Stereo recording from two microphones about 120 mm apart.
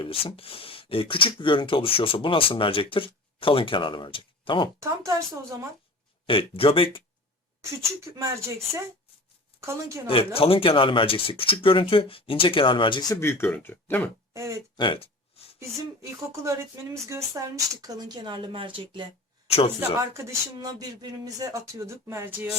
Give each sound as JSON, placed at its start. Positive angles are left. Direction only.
{"t": 0.0, "sound": "speech", "side_deg": 50}
{"t": 4.8, "sound": "speech", "side_deg": -25}
{"t": 6.2, "sound": "speech", "side_deg": 50}
{"t": 7.6, "sound": "speech", "side_deg": -25}
{"t": 9.6, "sound": "speech", "side_deg": -25}
{"t": 10.1, "sound": "speech", "side_deg": 50}
{"t": 13.1, "sound": "speech", "side_deg": 20}
{"t": 14.3, "sound": "speech", "side_deg": -25}
{"t": 14.8, "sound": "a sound", "side_deg": 50}
{"t": 16.3, "sound": "speech", "side_deg": -25}
{"t": 19.5, "sound": "speech", "side_deg": 55}
{"t": 19.8, "sound": "speech", "side_deg": -25}